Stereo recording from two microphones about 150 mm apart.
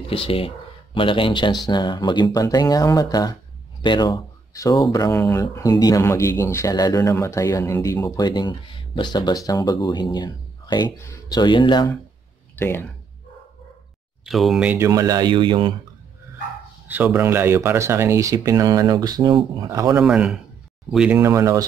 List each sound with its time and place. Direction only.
0.1 s speech: 40° left (ahead or behind)
12.5 s speech: 15° left (ahead or behind)
14.2 s speech: centre (ahead or behind)
14.9 s speech: 25° right (ahead or behind)
16.8 s speech: 10° right (ahead or behind)
20.0 s speech: 5° right (ahead or behind)
21.2 s speech: 20° right (ahead or behind)